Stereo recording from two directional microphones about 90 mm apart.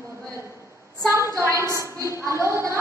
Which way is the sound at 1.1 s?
35° right (ahead or behind).